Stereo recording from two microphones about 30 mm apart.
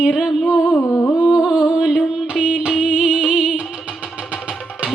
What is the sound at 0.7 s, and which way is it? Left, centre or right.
Humming, left.